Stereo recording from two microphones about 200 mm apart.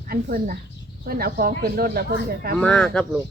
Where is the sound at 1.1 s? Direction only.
50° right (ahead or behind).